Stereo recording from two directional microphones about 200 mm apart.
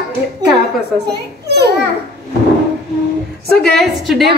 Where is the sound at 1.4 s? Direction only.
55° right (ahead or behind).